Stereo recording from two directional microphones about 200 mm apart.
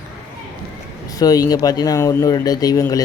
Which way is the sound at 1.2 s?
20° left (ahead or behind).